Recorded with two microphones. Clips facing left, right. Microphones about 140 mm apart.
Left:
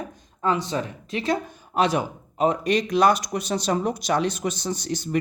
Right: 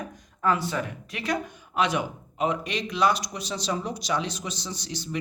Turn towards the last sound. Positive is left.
turn(degrees=50)  # may be behind; listen again after turning